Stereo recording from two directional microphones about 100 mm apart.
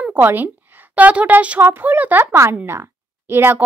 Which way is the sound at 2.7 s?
25° right (ahead or behind).